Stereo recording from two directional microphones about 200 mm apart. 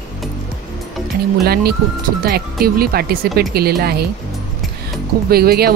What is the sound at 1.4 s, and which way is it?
Speech, 50° right (ahead or behind).